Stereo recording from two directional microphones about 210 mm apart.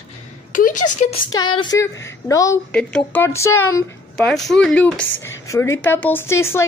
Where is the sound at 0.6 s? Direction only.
40° left (ahead or behind).